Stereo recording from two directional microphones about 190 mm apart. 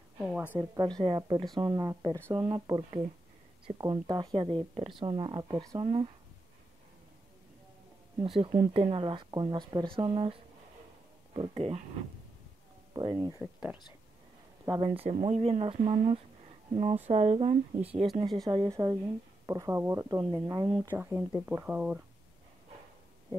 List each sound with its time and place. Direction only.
0.3 s a woman's voice: 5° right (ahead or behind)
0.6 s speech: 20° right (ahead or behind)
8.4 s speech: 35° right (ahead or behind)
12.9 s speech: 20° right (ahead or behind)
13.4 s speech: 5° right (ahead or behind)
14.7 s speech: 25° right (ahead or behind)
18.5 s speech: 20° right (ahead or behind)
20.9 s speech: 10° right (ahead or behind)